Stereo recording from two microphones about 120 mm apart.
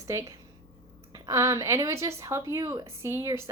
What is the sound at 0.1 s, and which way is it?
Speech, 25° right (ahead or behind).